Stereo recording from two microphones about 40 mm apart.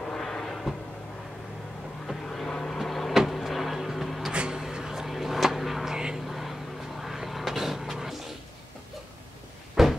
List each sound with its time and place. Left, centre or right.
0.2 s a sound: centre
2.2 s vehicle: centre
2.8 s a sound: centre
3.3 s vehicle: centre
4.3 s a sound: right
4.7 s vehicle: centre
5.9 s vehicle: centre
6.2 s vehicle: centre
9.8 s cupboard open or close: centre